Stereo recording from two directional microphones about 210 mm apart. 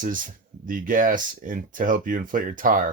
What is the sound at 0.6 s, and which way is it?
Speech, 40° right (ahead or behind).